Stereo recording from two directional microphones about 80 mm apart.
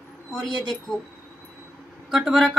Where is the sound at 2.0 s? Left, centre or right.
Centre.